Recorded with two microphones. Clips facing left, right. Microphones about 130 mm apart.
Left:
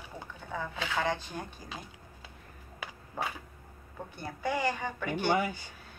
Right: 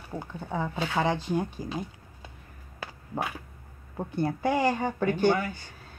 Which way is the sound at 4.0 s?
30° right (ahead or behind).